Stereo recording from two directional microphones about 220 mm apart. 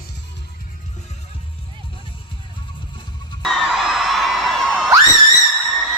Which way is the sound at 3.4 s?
Centre (ahead or behind).